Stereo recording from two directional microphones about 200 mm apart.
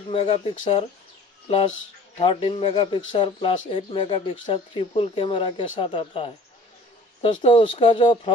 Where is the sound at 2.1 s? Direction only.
25° left (ahead or behind).